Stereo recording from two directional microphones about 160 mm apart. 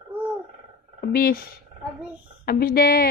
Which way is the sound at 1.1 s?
70° left (ahead or behind).